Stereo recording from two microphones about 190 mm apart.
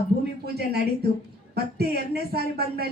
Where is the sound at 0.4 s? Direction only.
55° right (ahead or behind).